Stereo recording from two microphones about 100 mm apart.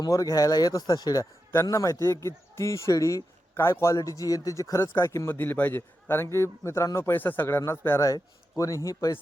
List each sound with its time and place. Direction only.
0.0 s a man's voice: 35° left (ahead or behind)
5.4 s a man's voice: 20° left (ahead or behind); by 9.1 s 35° left (ahead or behind)